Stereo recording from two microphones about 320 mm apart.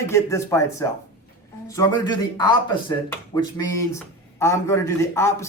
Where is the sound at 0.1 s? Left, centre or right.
Centre.